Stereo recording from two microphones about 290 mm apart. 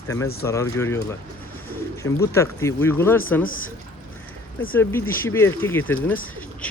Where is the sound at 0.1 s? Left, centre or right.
Centre.